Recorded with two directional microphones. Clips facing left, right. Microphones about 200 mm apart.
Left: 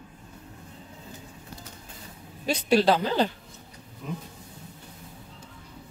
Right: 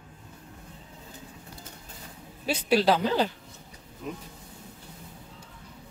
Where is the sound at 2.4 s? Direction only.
5° right (ahead or behind).